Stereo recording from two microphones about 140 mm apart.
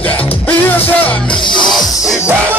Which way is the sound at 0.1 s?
10° left (ahead or behind).